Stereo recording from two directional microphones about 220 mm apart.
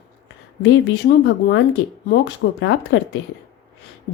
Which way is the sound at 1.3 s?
50° left (ahead or behind).